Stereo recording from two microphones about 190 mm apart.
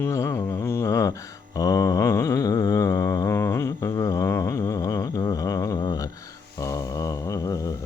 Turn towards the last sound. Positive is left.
turn(degrees=20)  # may be behind; listen again after turning